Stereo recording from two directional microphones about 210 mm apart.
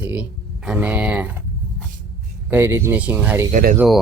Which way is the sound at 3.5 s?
40° right (ahead or behind).